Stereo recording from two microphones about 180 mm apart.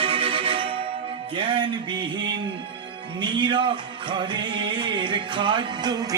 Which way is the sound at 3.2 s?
25° right (ahead or behind).